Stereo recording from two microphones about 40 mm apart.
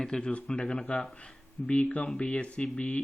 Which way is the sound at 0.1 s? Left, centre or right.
Left.